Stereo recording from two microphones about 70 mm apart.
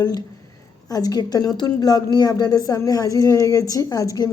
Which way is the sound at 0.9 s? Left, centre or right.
Left.